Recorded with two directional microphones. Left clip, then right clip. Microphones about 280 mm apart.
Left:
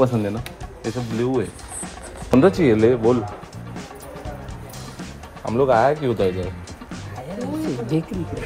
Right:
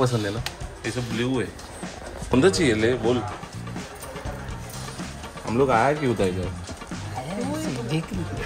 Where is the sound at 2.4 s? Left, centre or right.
Centre.